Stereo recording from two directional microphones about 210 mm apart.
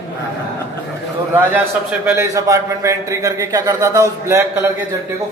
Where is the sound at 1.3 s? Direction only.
10° right (ahead or behind).